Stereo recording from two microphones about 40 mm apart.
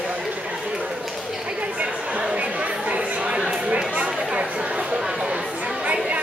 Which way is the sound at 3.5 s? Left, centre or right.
Right.